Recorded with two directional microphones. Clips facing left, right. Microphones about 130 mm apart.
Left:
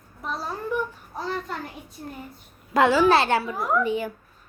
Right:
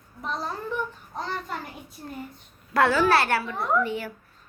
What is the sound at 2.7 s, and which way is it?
Speech, 20° left (ahead or behind).